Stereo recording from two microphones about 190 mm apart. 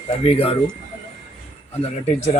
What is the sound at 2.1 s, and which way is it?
Speech, 35° left (ahead or behind).